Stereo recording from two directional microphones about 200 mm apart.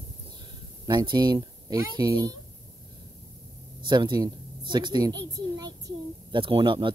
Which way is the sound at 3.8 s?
20° right (ahead or behind).